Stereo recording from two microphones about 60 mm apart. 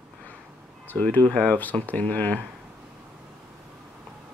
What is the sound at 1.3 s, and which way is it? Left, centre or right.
Speech, centre.